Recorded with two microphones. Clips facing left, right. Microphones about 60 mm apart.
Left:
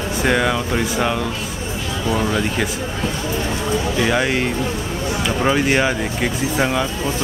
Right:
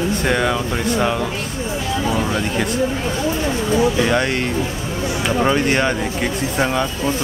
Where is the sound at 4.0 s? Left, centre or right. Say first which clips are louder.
Even; centre.